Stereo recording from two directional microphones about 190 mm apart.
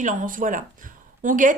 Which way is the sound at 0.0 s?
45° right (ahead or behind).